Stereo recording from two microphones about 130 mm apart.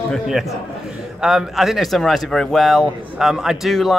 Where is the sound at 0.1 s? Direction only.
Centre (ahead or behind).